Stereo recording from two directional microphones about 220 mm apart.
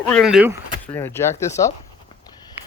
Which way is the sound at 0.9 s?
10° left (ahead or behind).